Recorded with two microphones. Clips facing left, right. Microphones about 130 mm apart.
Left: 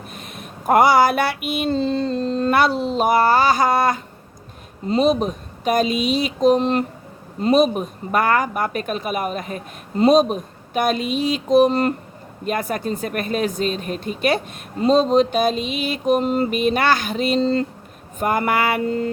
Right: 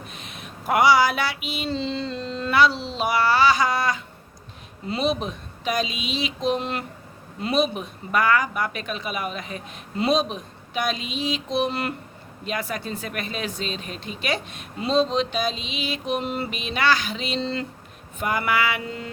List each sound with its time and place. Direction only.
0.1 s speech: 50° left (ahead or behind)